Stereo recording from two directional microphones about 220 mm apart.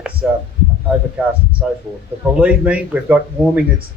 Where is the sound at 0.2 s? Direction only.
5° right (ahead or behind).